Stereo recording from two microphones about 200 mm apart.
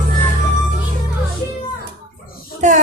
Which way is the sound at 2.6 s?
35° right (ahead or behind).